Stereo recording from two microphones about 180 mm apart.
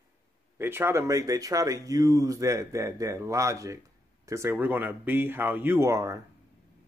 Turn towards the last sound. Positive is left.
turn(degrees=-15)  # may be behind; listen again after turning